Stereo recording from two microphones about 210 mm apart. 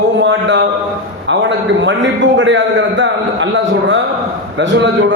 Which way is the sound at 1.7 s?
60° right (ahead or behind).